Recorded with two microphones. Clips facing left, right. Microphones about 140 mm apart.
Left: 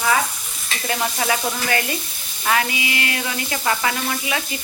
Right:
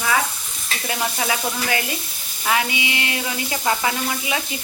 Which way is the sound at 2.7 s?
20° right (ahead or behind).